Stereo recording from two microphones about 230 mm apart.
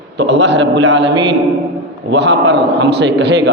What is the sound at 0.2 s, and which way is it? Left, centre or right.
A man's voice, right.